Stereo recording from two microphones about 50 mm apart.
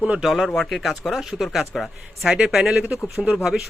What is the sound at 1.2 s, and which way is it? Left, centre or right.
Speech, centre.